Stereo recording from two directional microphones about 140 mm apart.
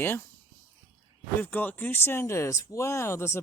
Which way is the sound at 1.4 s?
10° left (ahead or behind).